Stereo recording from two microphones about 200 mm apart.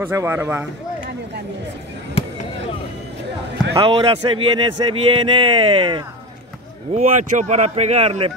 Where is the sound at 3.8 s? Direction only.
30° right (ahead or behind).